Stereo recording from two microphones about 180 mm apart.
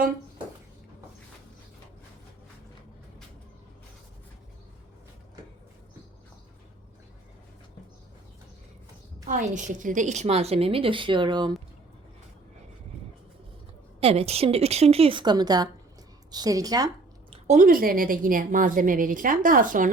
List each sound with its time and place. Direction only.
9.2 s a woman's voice: 40° right (ahead or behind); by 11.5 s 25° right (ahead or behind)
14.0 s a woman's voice: 35° right (ahead or behind)
17.3 s a woman's voice: 40° right (ahead or behind)